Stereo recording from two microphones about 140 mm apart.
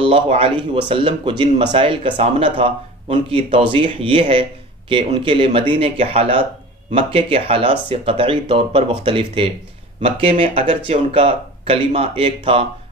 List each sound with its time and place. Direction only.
0.0 s speech: 40° right (ahead or behind)